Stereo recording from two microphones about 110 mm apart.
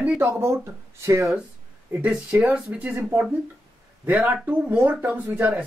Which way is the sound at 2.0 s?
10° right (ahead or behind).